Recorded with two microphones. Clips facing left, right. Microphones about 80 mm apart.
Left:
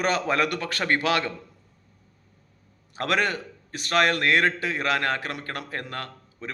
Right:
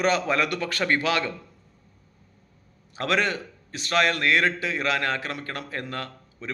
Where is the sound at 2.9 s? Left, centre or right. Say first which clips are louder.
Even; left.